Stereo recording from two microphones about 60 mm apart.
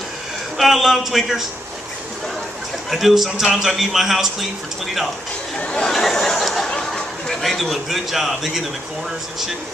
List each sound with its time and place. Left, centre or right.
0.6 s a man's voice: centre
2.9 s a man's voice: centre
5.6 s speech: centre
5.9 s a sound: centre
6.9 s a man's voice: centre